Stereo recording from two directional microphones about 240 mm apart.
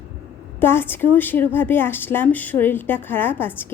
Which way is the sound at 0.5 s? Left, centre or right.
Centre.